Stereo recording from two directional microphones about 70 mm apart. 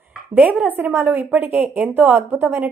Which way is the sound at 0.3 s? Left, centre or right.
Right.